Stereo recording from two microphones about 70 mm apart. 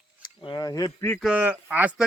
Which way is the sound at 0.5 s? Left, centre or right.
Left.